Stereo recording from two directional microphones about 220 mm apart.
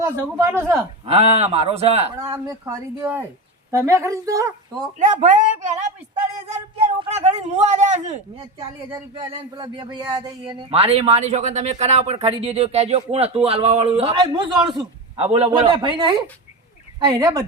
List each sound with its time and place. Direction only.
0.0 s speech: 10° right (ahead or behind)
1.0 s speech: 25° right (ahead or behind)
2.2 s speech: 15° right (ahead or behind)
4.9 s speech: 35° right (ahead or behind)
7.0 s speech: 30° right (ahead or behind)
9.1 s speech: 25° right (ahead or behind)